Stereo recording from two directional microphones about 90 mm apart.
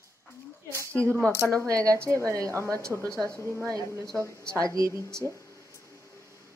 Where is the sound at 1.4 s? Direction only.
30° right (ahead or behind).